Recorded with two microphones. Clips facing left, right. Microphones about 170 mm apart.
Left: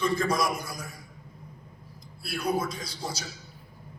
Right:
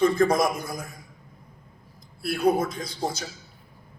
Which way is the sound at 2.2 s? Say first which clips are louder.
Right 6 dB; 55° right (ahead or behind).